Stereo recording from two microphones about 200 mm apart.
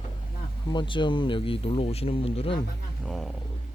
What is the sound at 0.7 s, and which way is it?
Speech, 25° left (ahead or behind).